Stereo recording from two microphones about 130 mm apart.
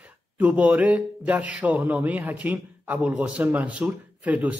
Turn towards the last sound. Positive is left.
turn(degrees=-10)  # may be behind; listen again after turning